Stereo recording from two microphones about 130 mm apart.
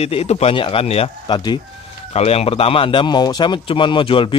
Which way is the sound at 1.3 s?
35° left (ahead or behind).